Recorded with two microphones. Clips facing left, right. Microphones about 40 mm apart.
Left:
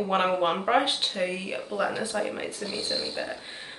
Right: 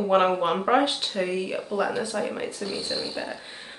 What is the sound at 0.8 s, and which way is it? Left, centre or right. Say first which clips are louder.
Speech: right 2 dB; centre.